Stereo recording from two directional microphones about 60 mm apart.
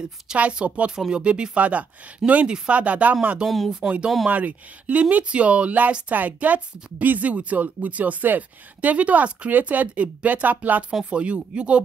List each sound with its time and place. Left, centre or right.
0.4 s a woman's voice: right
2.8 s a woman's voice: right
3.4 s speech: centre
4.3 s a woman's voice: right